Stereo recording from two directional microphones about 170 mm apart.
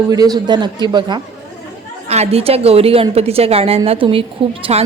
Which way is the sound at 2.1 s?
40° right (ahead or behind).